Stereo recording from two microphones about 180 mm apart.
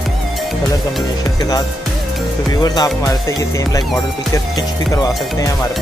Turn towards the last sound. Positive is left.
turn(degrees=20)  # may be behind; listen again after turning